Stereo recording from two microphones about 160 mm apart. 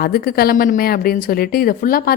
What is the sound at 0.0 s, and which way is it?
Speech, 70° left (ahead or behind).